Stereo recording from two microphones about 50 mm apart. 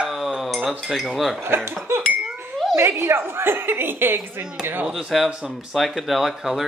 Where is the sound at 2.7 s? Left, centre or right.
Right.